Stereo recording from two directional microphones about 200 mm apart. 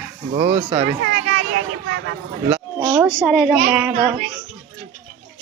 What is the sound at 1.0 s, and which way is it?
Children playing, 55° right (ahead or behind).